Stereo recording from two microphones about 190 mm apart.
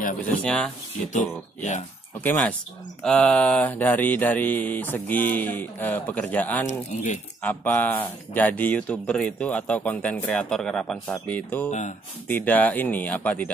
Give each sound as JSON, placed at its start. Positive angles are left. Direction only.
{"t": 0.2, "sound": "speech", "side_deg": 5}
{"t": 1.1, "sound": "speech", "side_deg": 40}
{"t": 3.0, "sound": "speech", "side_deg": 5}
{"t": 6.6, "sound": "speech", "side_deg": 40}
{"t": 7.4, "sound": "speech", "side_deg": 10}